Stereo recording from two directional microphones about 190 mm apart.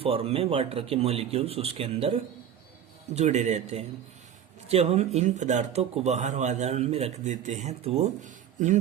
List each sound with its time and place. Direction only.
0.0 s speech: 30° right (ahead or behind)